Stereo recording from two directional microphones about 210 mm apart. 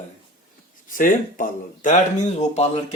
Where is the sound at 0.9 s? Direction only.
40° left (ahead or behind).